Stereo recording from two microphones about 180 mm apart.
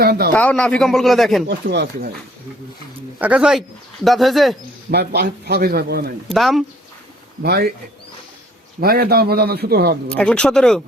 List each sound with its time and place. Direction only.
0.0 s a man's voice: 60° right (ahead or behind)
0.3 s a man's voice: 5° left (ahead or behind)
1.5 s a man's voice: 65° right (ahead or behind)
3.2 s a man's voice: 5° right (ahead or behind)
4.9 s a man's voice: 65° right (ahead or behind)
6.2 s a man's voice: centre (ahead or behind)
7.4 s a man's voice: 60° right (ahead or behind)
8.8 s a man's voice: 60° right (ahead or behind)
10.1 s a man's voice: 5° left (ahead or behind)